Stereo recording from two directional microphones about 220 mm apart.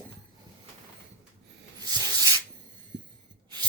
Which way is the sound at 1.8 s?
20° right (ahead or behind).